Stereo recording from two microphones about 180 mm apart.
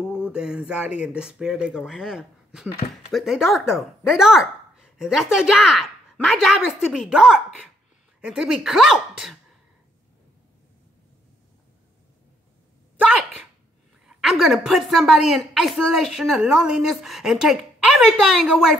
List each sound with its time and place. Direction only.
0.0 s a sound: 10° left (ahead or behind)
0.3 s a woman's voice: 5° right (ahead or behind)
14.0 s a woman's voice: centre (ahead or behind)